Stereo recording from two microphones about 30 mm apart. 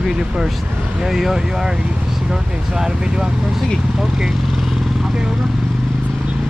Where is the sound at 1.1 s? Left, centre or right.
Centre.